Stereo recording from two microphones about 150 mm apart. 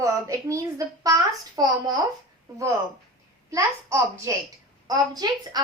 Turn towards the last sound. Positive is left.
turn(degrees=-25)  # may be behind; listen again after turning